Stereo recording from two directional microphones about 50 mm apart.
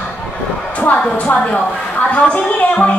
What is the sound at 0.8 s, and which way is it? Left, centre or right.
Speech, left.